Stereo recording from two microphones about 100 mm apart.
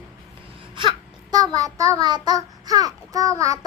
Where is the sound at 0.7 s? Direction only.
50° right (ahead or behind).